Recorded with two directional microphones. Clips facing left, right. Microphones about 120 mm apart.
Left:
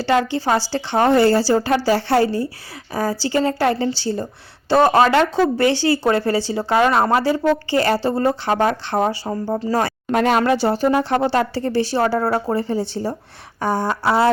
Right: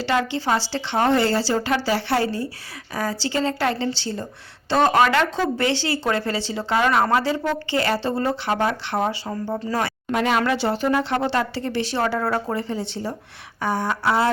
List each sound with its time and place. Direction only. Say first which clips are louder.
0.3 s speech: left 3 dB; 40° left (ahead or behind)
2.9 s speech: left 4 dB; 25° left (ahead or behind)
3.3 s speech: left 5 dB; 35° left (ahead or behind)
10.1 s speech: left 4 dB; 50° left (ahead or behind)